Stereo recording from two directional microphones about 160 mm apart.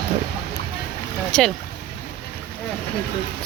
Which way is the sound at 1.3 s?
5° left (ahead or behind).